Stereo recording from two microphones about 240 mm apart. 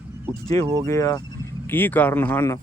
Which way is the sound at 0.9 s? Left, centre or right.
Centre.